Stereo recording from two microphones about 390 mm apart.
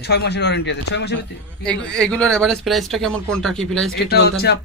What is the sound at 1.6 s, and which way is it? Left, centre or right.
Speech, centre.